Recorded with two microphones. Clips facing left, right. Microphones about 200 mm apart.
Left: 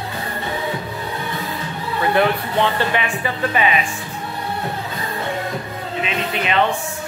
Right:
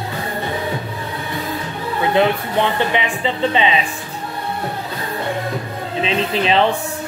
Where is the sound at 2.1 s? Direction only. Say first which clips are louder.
Right 1 dB; 20° right (ahead or behind).